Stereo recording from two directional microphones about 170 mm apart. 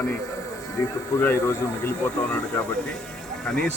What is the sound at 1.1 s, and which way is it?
Speech, 15° left (ahead or behind).